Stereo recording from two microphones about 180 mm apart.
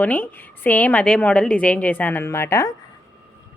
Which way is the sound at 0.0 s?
10° left (ahead or behind).